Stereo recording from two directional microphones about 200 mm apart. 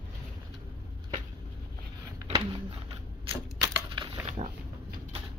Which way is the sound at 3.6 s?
25° right (ahead or behind).